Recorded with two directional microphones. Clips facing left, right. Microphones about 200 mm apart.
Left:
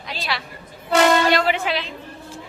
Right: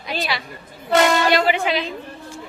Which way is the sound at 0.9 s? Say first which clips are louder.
Even; centre (ahead or behind).